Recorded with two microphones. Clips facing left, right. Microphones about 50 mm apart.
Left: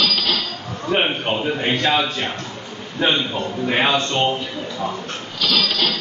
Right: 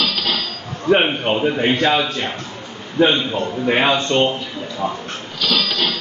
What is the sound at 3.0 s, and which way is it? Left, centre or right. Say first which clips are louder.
A man's voice: right 4 dB; right.